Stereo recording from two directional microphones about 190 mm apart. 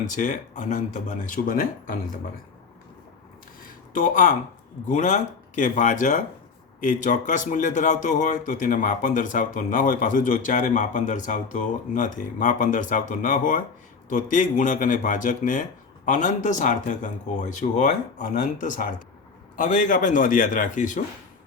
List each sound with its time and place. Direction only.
0.1 s speech: 40° left (ahead or behind)
3.6 s a sound: 45° left (ahead or behind)
4.9 s speech: 40° left (ahead or behind)